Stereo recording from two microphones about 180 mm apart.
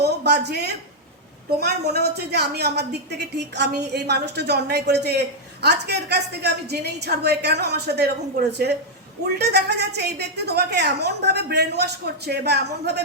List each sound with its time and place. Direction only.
0.0 s a woman's voice: 65° right (ahead or behind)